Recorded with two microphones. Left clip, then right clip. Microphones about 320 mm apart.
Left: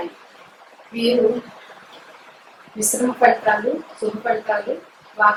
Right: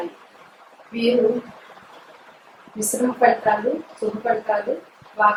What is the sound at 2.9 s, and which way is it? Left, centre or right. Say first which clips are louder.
A woman's voice: left 2 dB; centre.